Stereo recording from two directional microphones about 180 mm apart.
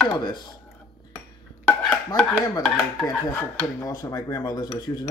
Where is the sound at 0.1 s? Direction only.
25° left (ahead or behind).